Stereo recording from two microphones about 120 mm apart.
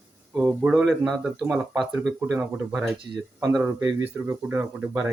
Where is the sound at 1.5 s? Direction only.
15° right (ahead or behind).